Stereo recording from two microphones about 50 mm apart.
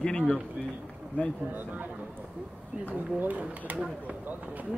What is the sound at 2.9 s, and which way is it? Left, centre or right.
Speech, right.